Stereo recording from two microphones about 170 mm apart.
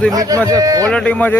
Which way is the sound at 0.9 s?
5° left (ahead or behind).